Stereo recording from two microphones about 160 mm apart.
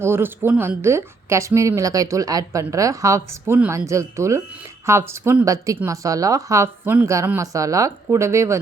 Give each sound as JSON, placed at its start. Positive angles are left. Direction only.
{"t": 0.0, "sound": "a woman's voice", "side_deg": -15}